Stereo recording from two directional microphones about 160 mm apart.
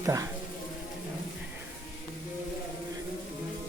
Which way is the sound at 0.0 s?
20° right (ahead or behind).